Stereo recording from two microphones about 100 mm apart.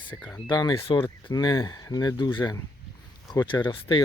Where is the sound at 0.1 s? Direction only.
15° left (ahead or behind).